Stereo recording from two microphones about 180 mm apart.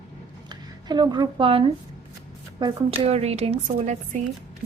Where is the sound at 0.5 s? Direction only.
25° right (ahead or behind).